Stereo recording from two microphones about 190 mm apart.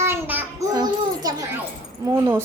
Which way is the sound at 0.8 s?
20° right (ahead or behind).